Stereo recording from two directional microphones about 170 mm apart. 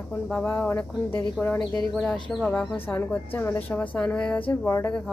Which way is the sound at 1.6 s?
25° left (ahead or behind).